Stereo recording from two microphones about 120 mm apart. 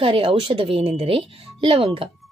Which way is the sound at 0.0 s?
50° right (ahead or behind).